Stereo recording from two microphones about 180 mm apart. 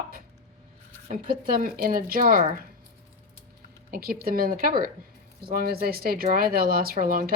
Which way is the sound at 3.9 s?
55° right (ahead or behind).